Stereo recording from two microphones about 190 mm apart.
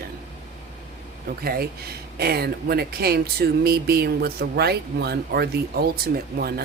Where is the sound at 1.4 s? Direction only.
55° right (ahead or behind).